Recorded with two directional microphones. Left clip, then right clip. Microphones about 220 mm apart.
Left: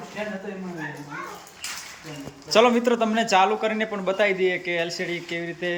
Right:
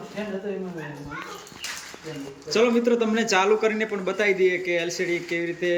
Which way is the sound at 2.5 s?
10° left (ahead or behind).